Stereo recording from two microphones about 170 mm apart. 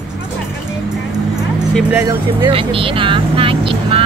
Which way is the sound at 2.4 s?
30° right (ahead or behind).